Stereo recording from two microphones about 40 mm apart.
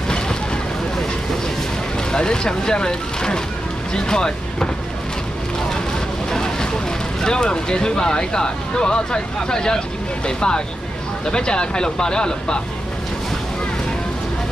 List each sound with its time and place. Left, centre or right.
2.1 s speech: centre
6.3 s vehicle: centre
7.2 s speech: centre